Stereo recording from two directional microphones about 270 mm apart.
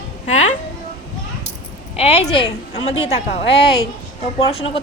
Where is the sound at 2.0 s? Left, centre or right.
Left.